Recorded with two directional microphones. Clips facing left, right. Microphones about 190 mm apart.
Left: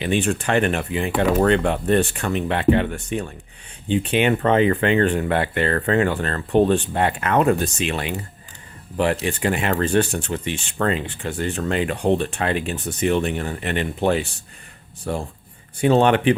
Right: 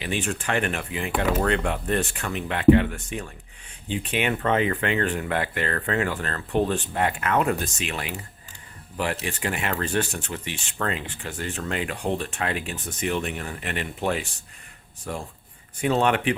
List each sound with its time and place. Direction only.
0.0 s speech: 30° left (ahead or behind)
15.8 s speech: 30° left (ahead or behind)